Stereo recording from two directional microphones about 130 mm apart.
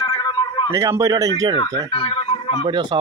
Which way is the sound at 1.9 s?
45° left (ahead or behind).